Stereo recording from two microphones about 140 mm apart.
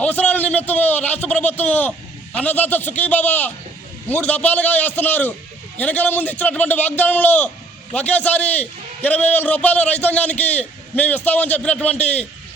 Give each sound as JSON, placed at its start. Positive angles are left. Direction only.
{"t": 0.0, "sound": "a man's voice", "side_deg": 10}
{"t": 11.9, "sound": "a man's voice", "side_deg": 50}